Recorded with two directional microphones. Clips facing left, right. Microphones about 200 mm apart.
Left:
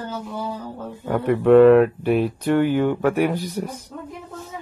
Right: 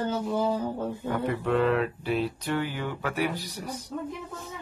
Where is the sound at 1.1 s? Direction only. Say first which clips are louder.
Left 13 dB; 60° left (ahead or behind).